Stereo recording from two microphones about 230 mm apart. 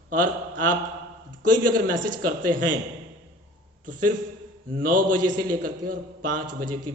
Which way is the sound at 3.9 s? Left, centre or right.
Right.